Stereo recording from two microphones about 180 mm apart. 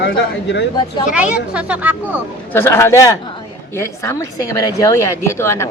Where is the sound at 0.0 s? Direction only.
75° left (ahead or behind).